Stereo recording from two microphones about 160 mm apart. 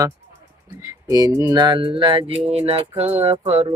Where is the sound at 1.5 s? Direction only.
30° right (ahead or behind).